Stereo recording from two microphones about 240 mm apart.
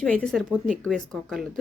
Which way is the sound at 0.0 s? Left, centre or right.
Centre.